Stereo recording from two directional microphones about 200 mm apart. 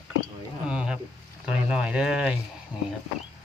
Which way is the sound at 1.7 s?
5° right (ahead or behind).